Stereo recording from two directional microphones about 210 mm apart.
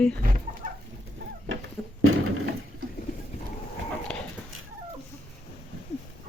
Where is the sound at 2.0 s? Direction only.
85° right.